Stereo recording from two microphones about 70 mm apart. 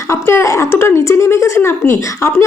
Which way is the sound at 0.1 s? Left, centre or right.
Left.